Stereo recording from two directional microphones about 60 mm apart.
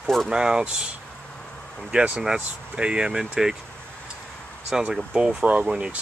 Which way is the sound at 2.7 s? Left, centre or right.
Centre.